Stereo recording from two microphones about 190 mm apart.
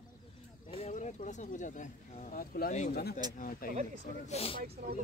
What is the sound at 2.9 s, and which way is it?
Speech, 55° left (ahead or behind).